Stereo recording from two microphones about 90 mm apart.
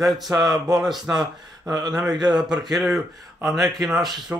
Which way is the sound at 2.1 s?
55° right (ahead or behind).